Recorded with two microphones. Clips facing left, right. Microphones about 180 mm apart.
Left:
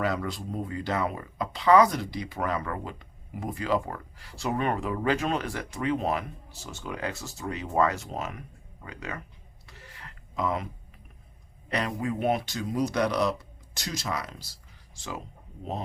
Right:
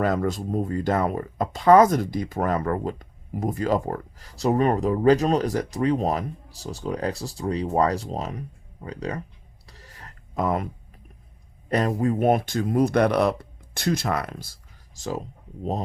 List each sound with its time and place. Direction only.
0.0 s speech: 45° right (ahead or behind)
9.6 s a sound: 40° right (ahead or behind)
11.7 s speech: 45° right (ahead or behind)